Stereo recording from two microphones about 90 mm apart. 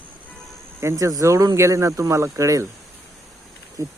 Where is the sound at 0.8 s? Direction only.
30° right (ahead or behind).